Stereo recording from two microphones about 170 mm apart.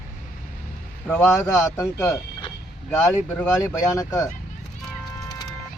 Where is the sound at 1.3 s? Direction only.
15° left (ahead or behind).